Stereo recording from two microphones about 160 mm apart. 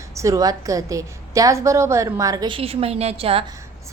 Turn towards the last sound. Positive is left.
turn(degrees=-35)  # may be behind; listen again after turning